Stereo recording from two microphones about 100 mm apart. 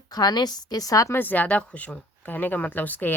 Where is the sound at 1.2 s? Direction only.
15° left (ahead or behind).